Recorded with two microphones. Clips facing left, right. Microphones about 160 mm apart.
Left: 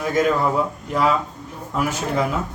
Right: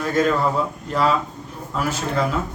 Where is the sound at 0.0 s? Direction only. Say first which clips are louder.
Even; 15° left (ahead or behind).